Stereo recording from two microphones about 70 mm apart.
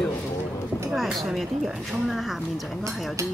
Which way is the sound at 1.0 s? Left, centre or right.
Centre.